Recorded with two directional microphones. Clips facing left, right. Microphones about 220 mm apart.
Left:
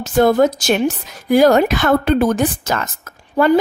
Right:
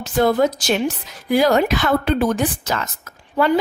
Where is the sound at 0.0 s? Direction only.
45° left (ahead or behind).